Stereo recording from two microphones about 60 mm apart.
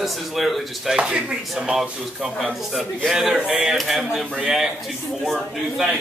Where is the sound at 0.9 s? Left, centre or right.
Centre.